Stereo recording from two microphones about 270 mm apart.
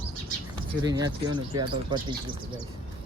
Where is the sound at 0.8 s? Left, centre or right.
Centre.